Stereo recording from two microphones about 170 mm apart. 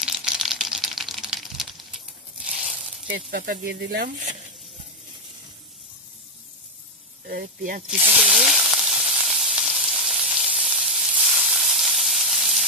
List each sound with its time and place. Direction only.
0.0 s a sound: centre (ahead or behind)
3.1 s speech: 65° right (ahead or behind)
7.2 s speech: 55° right (ahead or behind)
7.8 s sizzle: 5° right (ahead or behind)